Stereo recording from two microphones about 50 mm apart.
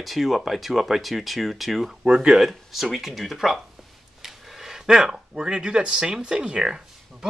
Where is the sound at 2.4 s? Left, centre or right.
Centre.